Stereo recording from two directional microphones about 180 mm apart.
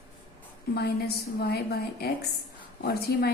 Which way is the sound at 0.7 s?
60° left (ahead or behind).